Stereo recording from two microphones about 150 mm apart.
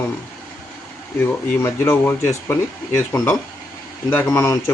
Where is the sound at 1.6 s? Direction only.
15° left (ahead or behind).